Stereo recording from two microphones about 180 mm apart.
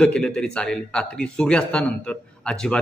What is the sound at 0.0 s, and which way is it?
A man's voice, 5° left (ahead or behind).